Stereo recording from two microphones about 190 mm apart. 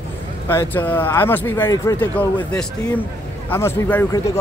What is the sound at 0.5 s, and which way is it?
Speech, 10° left (ahead or behind).